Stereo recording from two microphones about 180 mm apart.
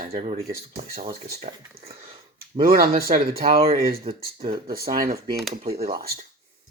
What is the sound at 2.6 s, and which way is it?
Speech, 55° right (ahead or behind).